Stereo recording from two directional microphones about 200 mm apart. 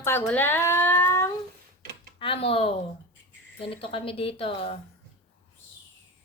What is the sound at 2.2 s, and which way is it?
A woman's voice, 25° left (ahead or behind).